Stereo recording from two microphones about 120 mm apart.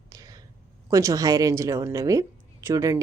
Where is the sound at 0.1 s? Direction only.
30° right (ahead or behind).